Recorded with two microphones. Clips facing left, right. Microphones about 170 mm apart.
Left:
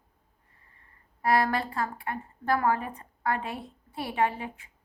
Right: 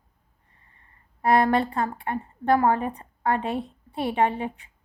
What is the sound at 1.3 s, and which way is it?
A woman's voice, 25° right (ahead or behind).